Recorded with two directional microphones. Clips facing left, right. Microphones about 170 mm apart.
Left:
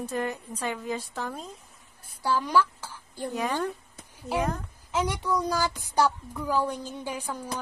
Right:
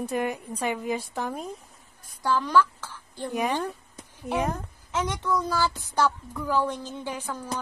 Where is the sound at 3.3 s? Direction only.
15° right (ahead or behind).